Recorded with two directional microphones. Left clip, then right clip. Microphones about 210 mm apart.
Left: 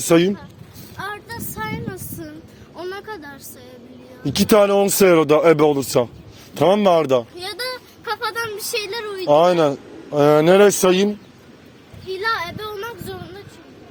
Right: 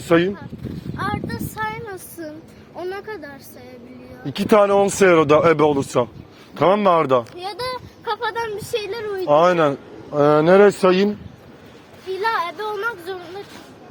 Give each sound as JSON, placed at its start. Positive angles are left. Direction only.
{"t": 0.1, "sound": "speech", "side_deg": 60}
{"t": 0.9, "sound": "speech", "side_deg": -15}
{"t": 2.7, "sound": "speech", "side_deg": 5}
{"t": 4.3, "sound": "speech", "side_deg": 60}
{"t": 6.5, "sound": "speech", "side_deg": 50}
{"t": 7.3, "sound": "speech", "side_deg": -5}
{"t": 9.2, "sound": "a man's voice", "side_deg": 40}
{"t": 12.2, "sound": "a sound", "side_deg": -10}